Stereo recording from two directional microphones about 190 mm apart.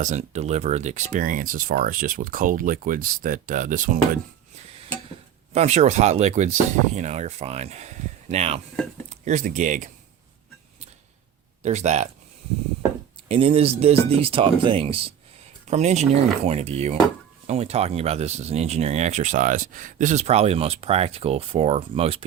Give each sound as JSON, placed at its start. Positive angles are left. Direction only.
{"t": 0.0, "sound": "speech", "side_deg": -40}
{"t": 5.5, "sound": "speech", "side_deg": -35}
{"t": 11.6, "sound": "speech", "side_deg": -35}
{"t": 13.2, "sound": "speech", "side_deg": -30}